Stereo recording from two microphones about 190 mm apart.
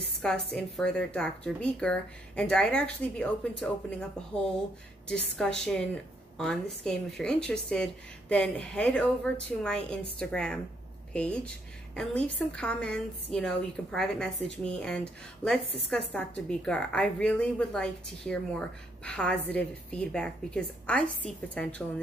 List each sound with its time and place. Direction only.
0.5 s speech: 5° left (ahead or behind)
5.4 s speech: 5° left (ahead or behind)
16.1 s speech: 5° left (ahead or behind)